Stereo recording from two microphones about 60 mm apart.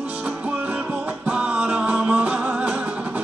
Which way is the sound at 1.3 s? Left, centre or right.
Centre.